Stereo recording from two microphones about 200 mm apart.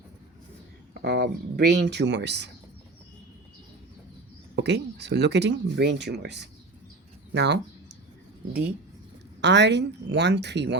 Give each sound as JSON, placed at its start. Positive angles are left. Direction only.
{"t": 1.0, "sound": "speech", "side_deg": -55}
{"t": 4.5, "sound": "speech", "side_deg": -55}
{"t": 9.4, "sound": "speech", "side_deg": -60}